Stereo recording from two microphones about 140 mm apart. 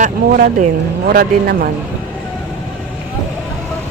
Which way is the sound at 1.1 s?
90° right.